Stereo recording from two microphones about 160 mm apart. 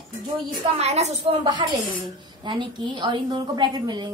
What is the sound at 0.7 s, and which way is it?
Speech, 40° right (ahead or behind).